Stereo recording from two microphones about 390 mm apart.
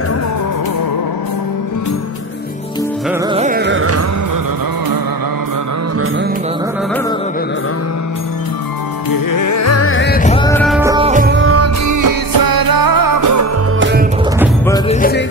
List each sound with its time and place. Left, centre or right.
3.3 s music: right
9.1 s music: left; by 13.5 s right
13.7 s music: right
14.7 s music: centre